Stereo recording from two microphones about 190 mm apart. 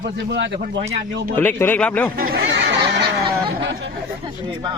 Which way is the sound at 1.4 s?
10° left (ahead or behind).